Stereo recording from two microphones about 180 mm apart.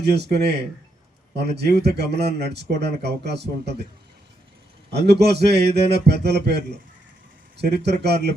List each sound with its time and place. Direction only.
0.0 s speech: 65° right (ahead or behind)
4.9 s a man's voice: 65° right (ahead or behind)